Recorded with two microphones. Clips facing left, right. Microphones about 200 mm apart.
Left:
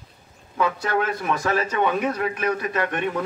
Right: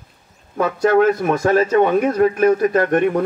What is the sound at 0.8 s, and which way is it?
Speech, 45° right (ahead or behind).